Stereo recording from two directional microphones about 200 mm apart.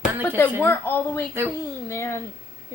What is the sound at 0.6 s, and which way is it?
A woman's voice, 10° left (ahead or behind).